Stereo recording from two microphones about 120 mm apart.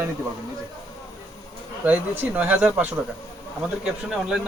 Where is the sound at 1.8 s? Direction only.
15° right (ahead or behind).